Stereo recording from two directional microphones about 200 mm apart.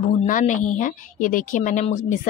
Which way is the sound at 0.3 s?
40° left (ahead or behind).